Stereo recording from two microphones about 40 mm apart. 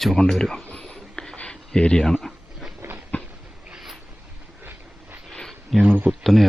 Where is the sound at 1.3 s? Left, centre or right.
Left.